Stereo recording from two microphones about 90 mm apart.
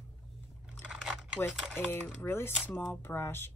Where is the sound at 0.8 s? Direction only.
10° right (ahead or behind).